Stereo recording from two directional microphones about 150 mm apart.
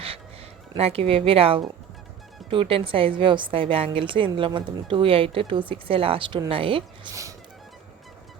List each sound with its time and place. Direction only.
0.8 s a woman's voice: 40° right (ahead or behind)
7.1 s music: 20° right (ahead or behind)